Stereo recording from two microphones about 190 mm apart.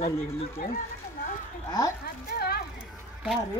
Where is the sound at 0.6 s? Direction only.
50° left (ahead or behind).